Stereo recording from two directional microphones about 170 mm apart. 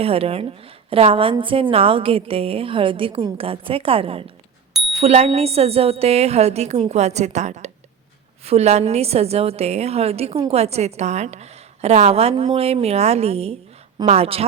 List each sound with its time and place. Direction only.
0.0 s a woman's voice: 35° right (ahead or behind)